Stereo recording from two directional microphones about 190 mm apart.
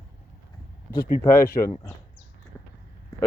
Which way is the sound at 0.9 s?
50° left (ahead or behind).